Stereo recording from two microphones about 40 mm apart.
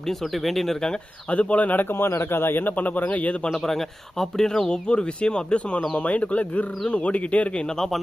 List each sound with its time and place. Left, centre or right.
0.1 s speech: centre
1.3 s speech: left
1.8 s speech: left
3.5 s speech: centre
4.7 s speech: left